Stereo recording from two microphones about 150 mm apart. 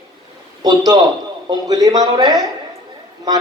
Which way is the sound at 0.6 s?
25° right (ahead or behind).